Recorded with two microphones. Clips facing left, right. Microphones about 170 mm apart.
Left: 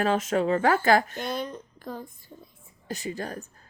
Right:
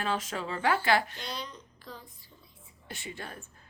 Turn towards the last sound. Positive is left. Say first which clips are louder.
# left 9 dB
turn(degrees=40)  # may be behind; listen again after turning